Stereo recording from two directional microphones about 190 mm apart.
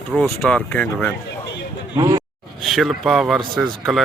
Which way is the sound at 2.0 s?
20° right (ahead or behind).